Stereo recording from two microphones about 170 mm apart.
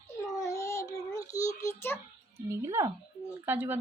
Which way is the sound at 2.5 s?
15° right (ahead or behind).